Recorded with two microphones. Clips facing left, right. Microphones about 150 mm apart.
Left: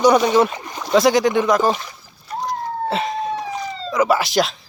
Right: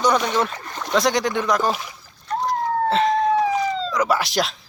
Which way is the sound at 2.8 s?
10° left (ahead or behind).